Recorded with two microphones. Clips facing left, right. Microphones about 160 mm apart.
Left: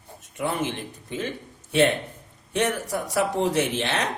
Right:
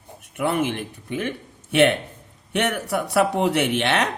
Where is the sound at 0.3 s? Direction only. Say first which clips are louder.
Right 4 dB; 65° right (ahead or behind).